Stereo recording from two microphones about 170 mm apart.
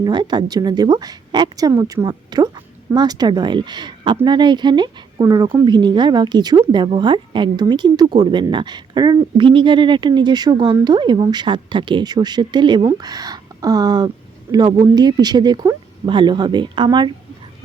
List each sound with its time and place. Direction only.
0.0 s speech: 25° right (ahead or behind)